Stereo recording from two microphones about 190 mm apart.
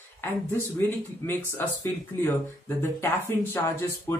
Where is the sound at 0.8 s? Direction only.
10° left (ahead or behind).